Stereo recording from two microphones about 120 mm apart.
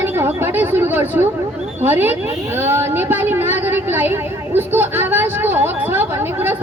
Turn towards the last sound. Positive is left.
turn(degrees=-15)  # may be behind; listen again after turning